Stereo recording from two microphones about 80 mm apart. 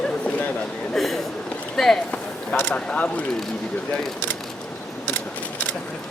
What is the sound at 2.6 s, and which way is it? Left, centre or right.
Speech, centre.